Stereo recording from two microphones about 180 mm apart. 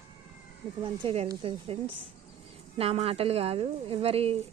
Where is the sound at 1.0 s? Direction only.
35° right (ahead or behind).